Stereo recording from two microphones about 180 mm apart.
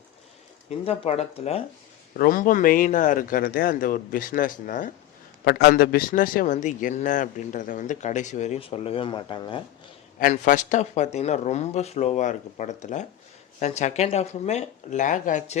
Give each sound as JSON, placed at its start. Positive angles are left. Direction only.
{"t": 0.9, "sound": "speech", "side_deg": 35}
{"t": 2.1, "sound": "a man's voice", "side_deg": 50}
{"t": 5.5, "sound": "a man's voice", "side_deg": 60}
{"t": 10.2, "sound": "speech", "side_deg": 50}